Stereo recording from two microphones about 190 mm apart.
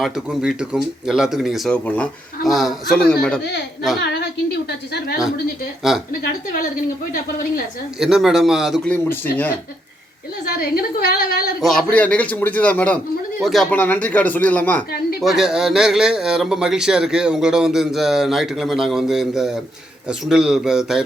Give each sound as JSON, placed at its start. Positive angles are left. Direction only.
{"t": 0.0, "sound": "speech", "side_deg": -5}
{"t": 4.0, "sound": "a sound", "side_deg": 65}
{"t": 5.9, "sound": "speech", "side_deg": 0}
{"t": 7.1, "sound": "speech", "side_deg": 45}
{"t": 7.9, "sound": "speech", "side_deg": 0}
{"t": 10.4, "sound": "speech", "side_deg": 50}
{"t": 11.6, "sound": "a man's voice", "side_deg": 5}